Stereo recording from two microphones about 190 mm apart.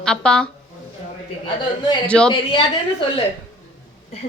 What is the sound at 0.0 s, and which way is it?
Speech, 5° left (ahead or behind).